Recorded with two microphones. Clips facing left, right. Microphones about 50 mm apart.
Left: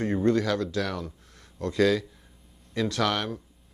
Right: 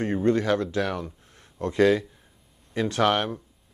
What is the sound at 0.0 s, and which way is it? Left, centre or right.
Speech, right.